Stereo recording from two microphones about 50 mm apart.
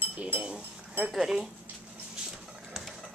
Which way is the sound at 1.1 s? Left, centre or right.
Centre.